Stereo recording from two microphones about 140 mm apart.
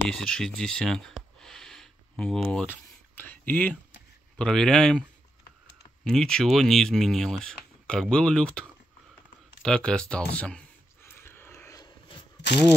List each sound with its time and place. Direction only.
0.1 s speech: 5° left (ahead or behind)
6.0 s speech: 5° left (ahead or behind)
11.1 s a sound: 15° left (ahead or behind)